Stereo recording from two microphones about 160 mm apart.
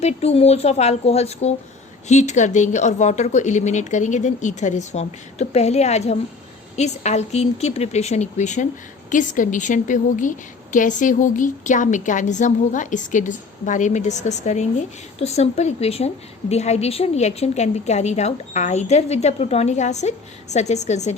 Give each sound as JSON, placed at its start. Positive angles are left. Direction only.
{"t": 0.0, "sound": "a woman's voice", "side_deg": 40}